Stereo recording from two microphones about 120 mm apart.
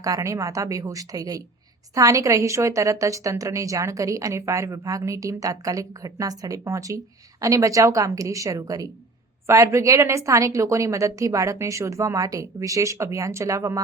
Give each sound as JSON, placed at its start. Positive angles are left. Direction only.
{"t": 0.0, "sound": "a woman's voice", "side_deg": -25}